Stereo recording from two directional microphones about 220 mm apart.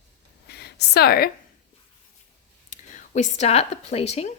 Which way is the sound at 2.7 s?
35° left (ahead or behind).